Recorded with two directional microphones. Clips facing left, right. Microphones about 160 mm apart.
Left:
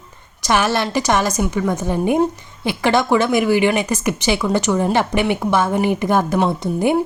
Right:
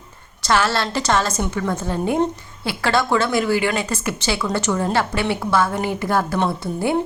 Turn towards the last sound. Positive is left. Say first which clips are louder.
# left 4 dB
turn(degrees=15)  # may be behind; listen again after turning